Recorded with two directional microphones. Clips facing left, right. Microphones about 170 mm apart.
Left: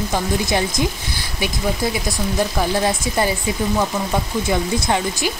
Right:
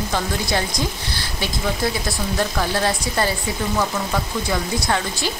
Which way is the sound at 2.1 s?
15° left (ahead or behind).